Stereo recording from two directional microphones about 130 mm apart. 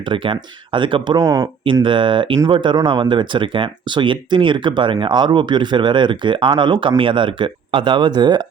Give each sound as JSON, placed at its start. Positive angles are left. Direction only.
{"t": 0.0, "sound": "speech", "side_deg": -40}
{"t": 1.2, "sound": "speech", "side_deg": -25}
{"t": 1.6, "sound": "speech", "side_deg": -40}